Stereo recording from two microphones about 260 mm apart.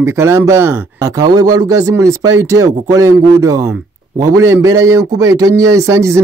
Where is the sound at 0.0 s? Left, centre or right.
Centre.